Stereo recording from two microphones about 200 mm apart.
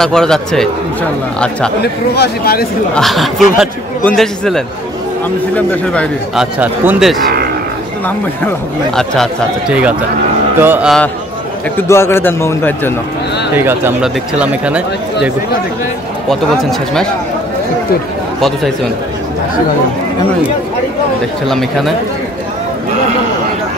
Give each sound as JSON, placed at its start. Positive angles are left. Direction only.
{"t": 0.0, "sound": "a man's voice", "side_deg": 5}
{"t": 1.8, "sound": "speech", "side_deg": 55}
{"t": 2.9, "sound": "a man's voice", "side_deg": 0}
{"t": 5.7, "sound": "a man's voice", "side_deg": 5}
{"t": 8.9, "sound": "a man's voice", "side_deg": 0}
{"t": 11.9, "sound": "a man's voice", "side_deg": 15}
{"t": 13.6, "sound": "speech", "side_deg": -10}
{"t": 21.5, "sound": "a man's voice", "side_deg": 0}